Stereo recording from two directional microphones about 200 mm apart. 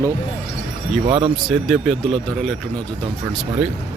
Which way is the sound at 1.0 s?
30° right (ahead or behind).